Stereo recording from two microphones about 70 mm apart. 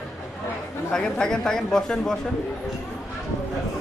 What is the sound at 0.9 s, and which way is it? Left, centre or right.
A man's voice, centre.